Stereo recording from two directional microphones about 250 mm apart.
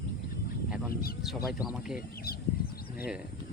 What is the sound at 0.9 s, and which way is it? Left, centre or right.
Speech, left.